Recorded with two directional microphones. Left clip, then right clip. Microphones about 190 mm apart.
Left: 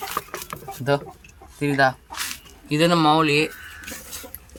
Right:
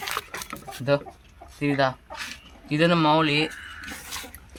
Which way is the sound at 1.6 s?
25° left (ahead or behind).